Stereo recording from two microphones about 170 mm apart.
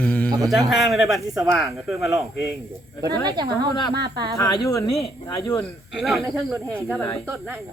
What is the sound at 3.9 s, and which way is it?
Speech, 75° right (ahead or behind).